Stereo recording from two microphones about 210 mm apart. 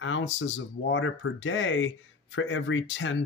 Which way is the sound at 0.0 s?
65° left (ahead or behind).